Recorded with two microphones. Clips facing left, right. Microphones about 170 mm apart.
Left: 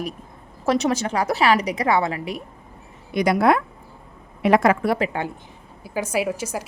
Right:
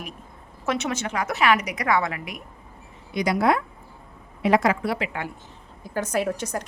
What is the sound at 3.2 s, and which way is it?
A woman's voice, 60° left (ahead or behind).